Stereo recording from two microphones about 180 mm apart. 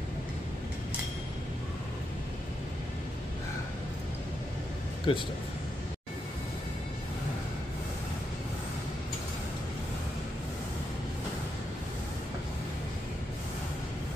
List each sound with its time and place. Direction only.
5.1 s speech: 30° left (ahead or behind)